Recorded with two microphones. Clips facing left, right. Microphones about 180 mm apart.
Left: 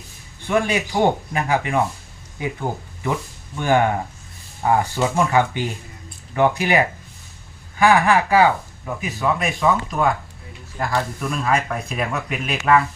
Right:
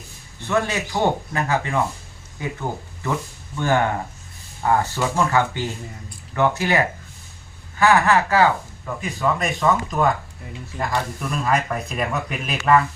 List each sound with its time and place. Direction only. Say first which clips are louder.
0.4 s speech: left 2 dB; 15° left (ahead or behind)
4.6 s speech: left 1 dB; 15° left (ahead or behind)